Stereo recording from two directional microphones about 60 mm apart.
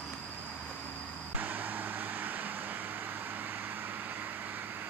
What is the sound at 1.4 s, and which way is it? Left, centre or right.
Vehicle, right.